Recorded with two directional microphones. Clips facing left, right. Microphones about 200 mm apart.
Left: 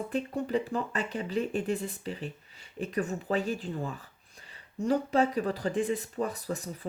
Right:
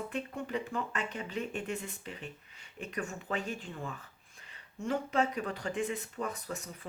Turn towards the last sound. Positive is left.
turn(degrees=35)  # may be behind; listen again after turning